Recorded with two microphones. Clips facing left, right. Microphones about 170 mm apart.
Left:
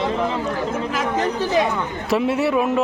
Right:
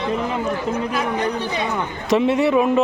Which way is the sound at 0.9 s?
90° left.